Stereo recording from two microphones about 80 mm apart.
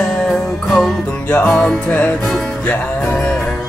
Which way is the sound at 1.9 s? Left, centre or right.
Centre.